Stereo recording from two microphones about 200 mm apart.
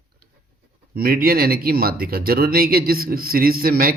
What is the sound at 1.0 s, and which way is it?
Speech, 50° right (ahead or behind).